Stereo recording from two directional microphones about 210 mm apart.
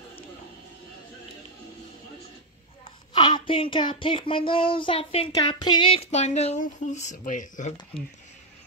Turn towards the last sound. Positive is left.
turn(degrees=35)  # may be behind; listen again after turning